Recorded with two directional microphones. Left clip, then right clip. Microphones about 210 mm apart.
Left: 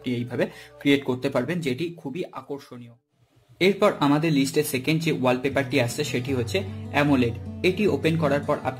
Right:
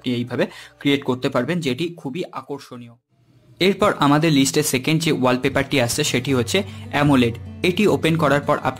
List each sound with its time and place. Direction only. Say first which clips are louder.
0.0 s speech: right 4 dB; 20° right (ahead or behind)